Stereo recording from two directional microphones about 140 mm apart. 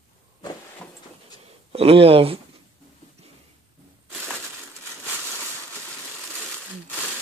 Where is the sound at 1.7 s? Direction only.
45° right (ahead or behind).